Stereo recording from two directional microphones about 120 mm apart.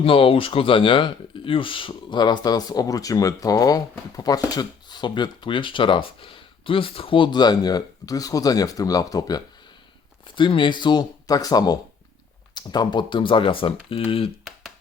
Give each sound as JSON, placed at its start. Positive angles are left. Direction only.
{"t": 0.0, "sound": "speech", "side_deg": 50}
{"t": 10.3, "sound": "speech", "side_deg": 45}